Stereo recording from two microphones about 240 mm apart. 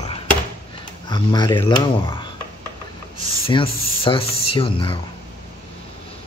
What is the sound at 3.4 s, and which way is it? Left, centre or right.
Speech, left.